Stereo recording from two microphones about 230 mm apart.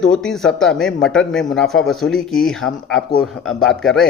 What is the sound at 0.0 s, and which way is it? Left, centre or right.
A man's voice, centre.